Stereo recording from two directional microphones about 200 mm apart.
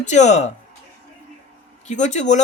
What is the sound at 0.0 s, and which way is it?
Speech, 35° left (ahead or behind).